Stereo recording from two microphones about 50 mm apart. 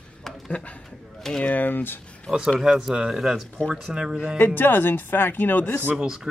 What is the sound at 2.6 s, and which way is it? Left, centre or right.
Speech, centre.